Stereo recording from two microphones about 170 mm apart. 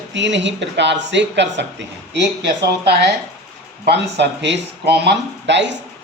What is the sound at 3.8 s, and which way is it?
Speech, 85° right.